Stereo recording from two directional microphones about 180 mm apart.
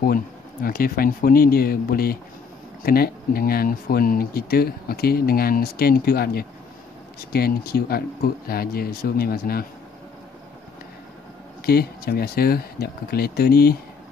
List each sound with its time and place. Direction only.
0.0 s speech: 55° left (ahead or behind)
11.6 s speech: 60° left (ahead or behind)